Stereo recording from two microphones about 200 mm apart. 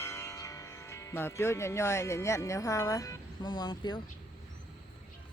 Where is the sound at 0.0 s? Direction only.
15° left (ahead or behind).